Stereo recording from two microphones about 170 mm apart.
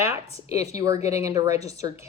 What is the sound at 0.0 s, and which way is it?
Speech, 15° right (ahead or behind).